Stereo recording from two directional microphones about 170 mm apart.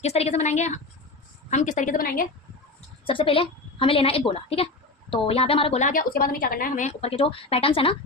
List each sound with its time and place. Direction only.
0.0 s a woman's voice: 40° left (ahead or behind)
3.1 s a woman's voice: 30° left (ahead or behind)